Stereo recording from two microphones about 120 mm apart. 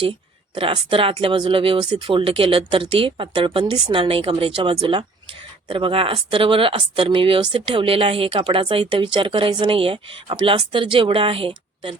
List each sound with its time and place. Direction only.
0.5 s speech: 45° right (ahead or behind)